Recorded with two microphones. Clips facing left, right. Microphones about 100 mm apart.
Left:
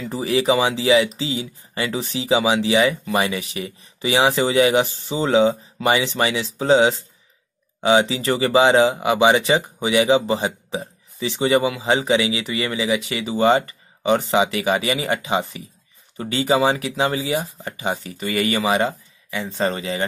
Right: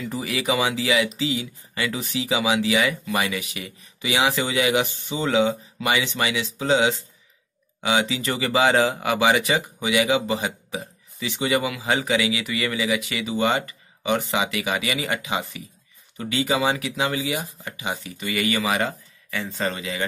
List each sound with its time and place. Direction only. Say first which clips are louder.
0.0 s speech: left 6 dB; 30° left (ahead or behind)
17.6 s speech: left 5 dB; 35° left (ahead or behind); by 19.6 s 20° left (ahead or behind)
19.6 s speech: left 5 dB; 30° left (ahead or behind)